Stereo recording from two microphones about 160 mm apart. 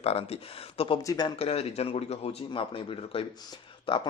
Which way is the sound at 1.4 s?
40° left (ahead or behind).